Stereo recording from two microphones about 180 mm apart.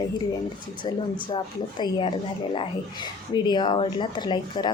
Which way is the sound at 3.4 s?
25° left (ahead or behind).